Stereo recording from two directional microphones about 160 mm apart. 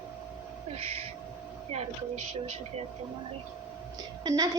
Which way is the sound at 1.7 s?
40° right (ahead or behind).